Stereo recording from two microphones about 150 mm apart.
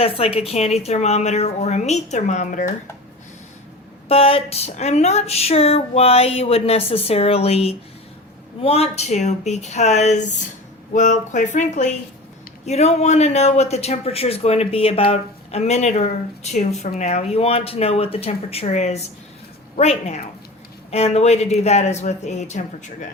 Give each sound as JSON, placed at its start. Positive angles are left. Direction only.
{"t": 0.0, "sound": "a man's voice", "side_deg": 40}
{"t": 4.1, "sound": "a man's voice", "side_deg": 40}